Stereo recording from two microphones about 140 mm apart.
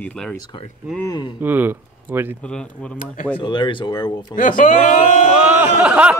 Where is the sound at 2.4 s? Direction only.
5° left (ahead or behind).